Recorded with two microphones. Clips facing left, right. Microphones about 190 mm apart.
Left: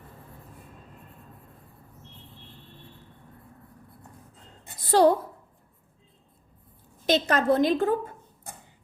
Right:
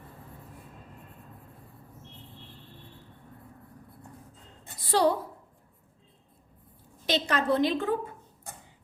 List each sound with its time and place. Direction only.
4.9 s a woman's voice: 45° left (ahead or behind)
7.0 s a woman's voice: 45° left (ahead or behind)